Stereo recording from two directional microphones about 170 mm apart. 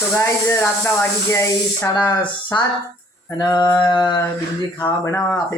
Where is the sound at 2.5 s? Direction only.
25° left (ahead or behind).